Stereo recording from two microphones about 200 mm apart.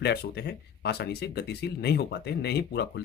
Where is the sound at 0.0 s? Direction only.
55° left (ahead or behind).